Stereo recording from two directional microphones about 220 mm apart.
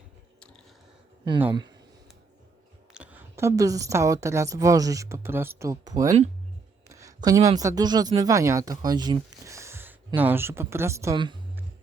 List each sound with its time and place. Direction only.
2.9 s a woman's voice: 5° right (ahead or behind)